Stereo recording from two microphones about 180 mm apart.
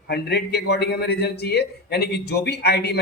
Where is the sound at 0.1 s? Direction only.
65° left (ahead or behind).